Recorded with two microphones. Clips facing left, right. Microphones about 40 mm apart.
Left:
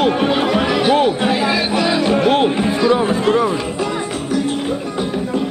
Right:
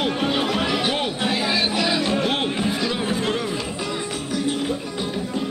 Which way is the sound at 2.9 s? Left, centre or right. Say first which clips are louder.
Left 9 dB; centre.